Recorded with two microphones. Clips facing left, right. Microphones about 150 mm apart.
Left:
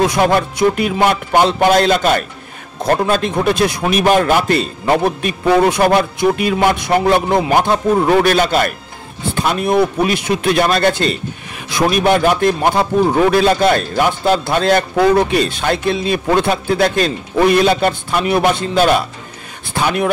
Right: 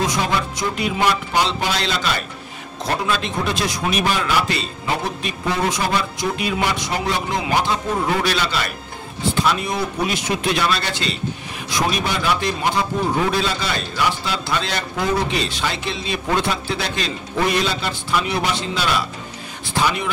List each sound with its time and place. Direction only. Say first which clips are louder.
0.0 s a man's voice: left 8 dB; 60° left (ahead or behind)